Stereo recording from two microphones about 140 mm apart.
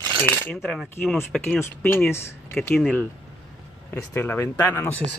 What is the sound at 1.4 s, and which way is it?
Speech, 15° left (ahead or behind).